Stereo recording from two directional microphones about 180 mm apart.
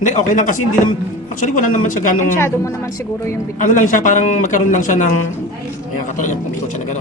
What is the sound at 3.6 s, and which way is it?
Speech, 45° left (ahead or behind).